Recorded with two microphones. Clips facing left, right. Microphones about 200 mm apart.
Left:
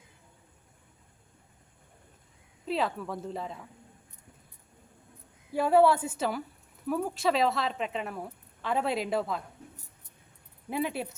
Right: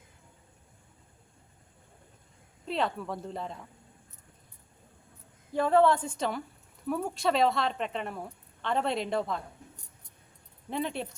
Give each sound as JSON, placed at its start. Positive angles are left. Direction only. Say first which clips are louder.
{"t": 2.6, "sound": "speech", "louder": "left 1 dB", "side_deg": 0}
{"t": 5.5, "sound": "a woman's voice", "louder": "left 1 dB", "side_deg": 10}